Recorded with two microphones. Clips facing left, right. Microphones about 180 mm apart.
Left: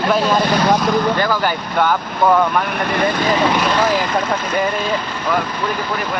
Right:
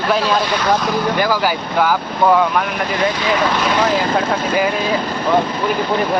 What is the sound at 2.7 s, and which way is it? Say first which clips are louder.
Speech: left 1 dB; 60° left (ahead or behind).